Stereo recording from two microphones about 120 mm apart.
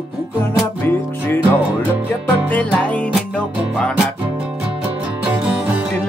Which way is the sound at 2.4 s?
15° left (ahead or behind).